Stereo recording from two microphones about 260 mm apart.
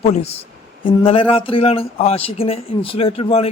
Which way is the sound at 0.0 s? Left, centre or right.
Left.